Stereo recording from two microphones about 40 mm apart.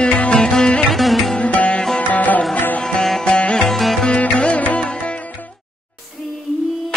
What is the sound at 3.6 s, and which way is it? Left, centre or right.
Music, centre.